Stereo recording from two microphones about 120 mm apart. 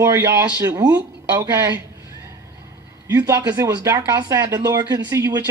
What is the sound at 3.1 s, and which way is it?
Speech, 25° right (ahead or behind).